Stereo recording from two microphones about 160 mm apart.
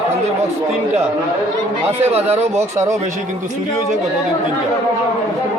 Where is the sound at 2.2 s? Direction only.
15° right (ahead or behind).